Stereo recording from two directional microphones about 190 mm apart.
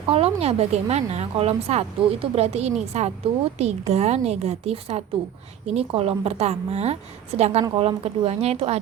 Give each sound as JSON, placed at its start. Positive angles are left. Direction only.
{"t": 0.1, "sound": "a woman's voice", "side_deg": -30}